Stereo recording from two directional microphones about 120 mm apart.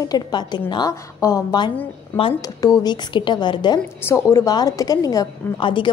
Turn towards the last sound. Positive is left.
turn(degrees=45)  # may be behind; listen again after turning